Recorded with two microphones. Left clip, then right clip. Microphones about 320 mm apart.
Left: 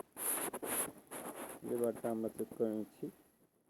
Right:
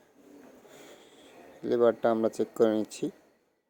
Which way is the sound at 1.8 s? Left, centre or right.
Right.